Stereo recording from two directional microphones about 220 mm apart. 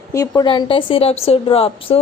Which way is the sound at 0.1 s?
15° left (ahead or behind).